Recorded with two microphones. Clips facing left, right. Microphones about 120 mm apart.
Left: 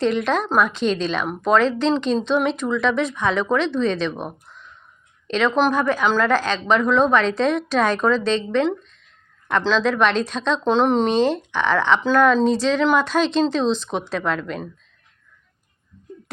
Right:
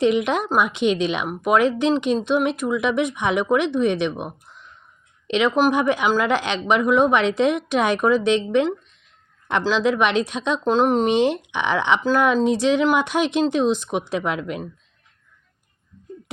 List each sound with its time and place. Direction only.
0.0 s a woman's voice: 15° right (ahead or behind)